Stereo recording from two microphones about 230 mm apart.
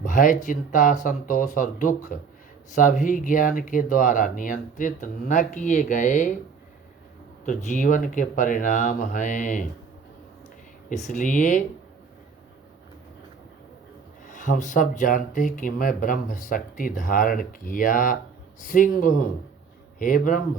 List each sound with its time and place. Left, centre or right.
0.0 s speech: left
7.4 s speech: left
10.8 s speech: left
14.3 s speech: left